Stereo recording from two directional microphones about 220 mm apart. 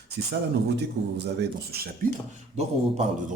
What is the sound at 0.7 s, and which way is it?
Speech, 50° right (ahead or behind).